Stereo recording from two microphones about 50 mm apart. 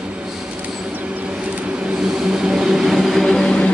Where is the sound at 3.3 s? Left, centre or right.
Centre.